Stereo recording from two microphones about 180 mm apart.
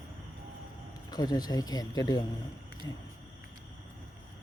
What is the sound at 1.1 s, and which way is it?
Speech, 20° left (ahead or behind).